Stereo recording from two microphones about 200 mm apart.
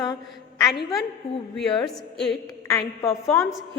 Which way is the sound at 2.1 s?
Centre (ahead or behind).